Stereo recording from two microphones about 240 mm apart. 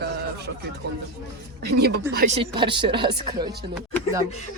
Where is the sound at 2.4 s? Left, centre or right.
Centre.